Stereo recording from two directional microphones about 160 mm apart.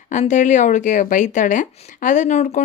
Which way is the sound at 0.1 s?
50° left (ahead or behind).